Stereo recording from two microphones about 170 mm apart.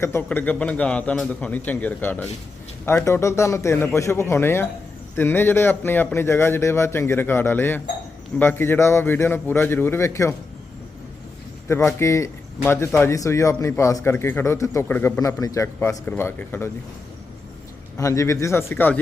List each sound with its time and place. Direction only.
0.0 s speech: 15° left (ahead or behind)
11.7 s speech: 15° left (ahead or behind)
17.9 s speech: 20° left (ahead or behind)